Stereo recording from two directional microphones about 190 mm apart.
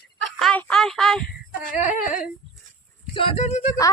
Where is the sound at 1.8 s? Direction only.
40° left (ahead or behind).